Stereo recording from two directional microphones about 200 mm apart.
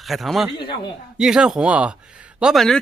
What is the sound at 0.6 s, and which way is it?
Speech, 25° left (ahead or behind).